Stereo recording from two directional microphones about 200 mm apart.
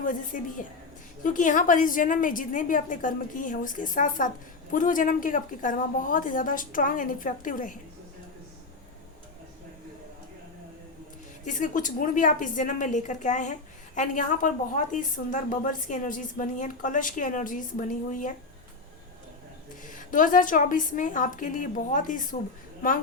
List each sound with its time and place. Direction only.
0.0 s a woman's voice: 40° left (ahead or behind)
11.4 s a woman's voice: 40° left (ahead or behind)
19.9 s a woman's voice: 40° left (ahead or behind)